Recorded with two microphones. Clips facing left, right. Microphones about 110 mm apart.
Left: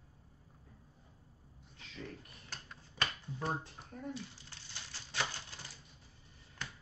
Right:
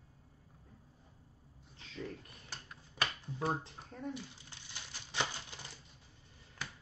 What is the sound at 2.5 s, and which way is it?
Finger snapping, 10° right (ahead or behind).